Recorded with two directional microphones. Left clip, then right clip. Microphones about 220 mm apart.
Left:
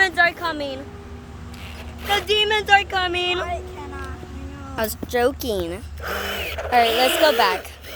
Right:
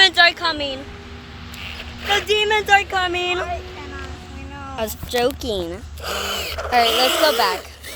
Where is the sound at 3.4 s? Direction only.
15° left (ahead or behind).